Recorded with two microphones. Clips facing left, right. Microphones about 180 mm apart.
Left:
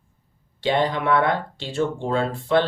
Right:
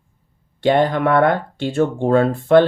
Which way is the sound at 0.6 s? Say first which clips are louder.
Right 6 dB; 50° right (ahead or behind).